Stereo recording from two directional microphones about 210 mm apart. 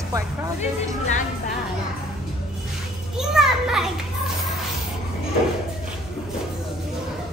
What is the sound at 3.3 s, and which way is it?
Children playing, centre (ahead or behind).